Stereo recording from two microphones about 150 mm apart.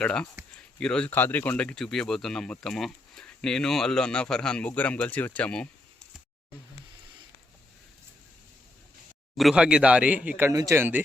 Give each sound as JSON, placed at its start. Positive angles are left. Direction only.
{"t": 0.0, "sound": "speech", "side_deg": 5}
{"t": 9.4, "sound": "speech", "side_deg": -5}
{"t": 10.5, "sound": "speech", "side_deg": -20}